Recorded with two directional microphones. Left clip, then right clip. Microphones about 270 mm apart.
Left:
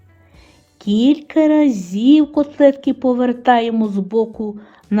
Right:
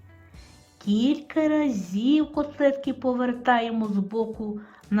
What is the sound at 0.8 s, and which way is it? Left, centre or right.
A woman's voice, left.